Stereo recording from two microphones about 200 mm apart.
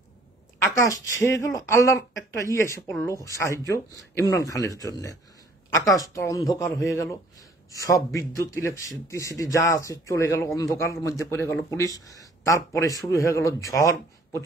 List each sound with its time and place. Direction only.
0.7 s speech: 15° left (ahead or behind)